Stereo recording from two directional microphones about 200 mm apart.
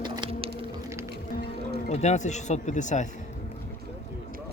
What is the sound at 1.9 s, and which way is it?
Speech, 35° left (ahead or behind).